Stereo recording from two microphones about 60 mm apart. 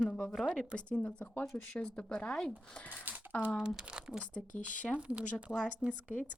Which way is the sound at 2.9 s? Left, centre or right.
Right.